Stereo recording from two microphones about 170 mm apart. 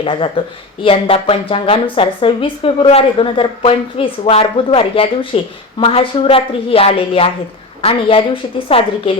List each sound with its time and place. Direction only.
0.0 s speech: 30° left (ahead or behind)